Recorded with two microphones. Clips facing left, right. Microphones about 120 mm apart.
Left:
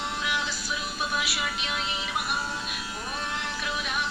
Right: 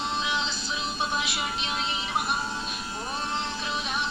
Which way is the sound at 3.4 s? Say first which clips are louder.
Right 1 dB; 25° right (ahead or behind).